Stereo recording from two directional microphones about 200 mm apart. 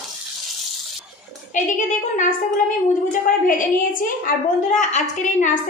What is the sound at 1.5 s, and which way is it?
A woman's voice, 40° left (ahead or behind).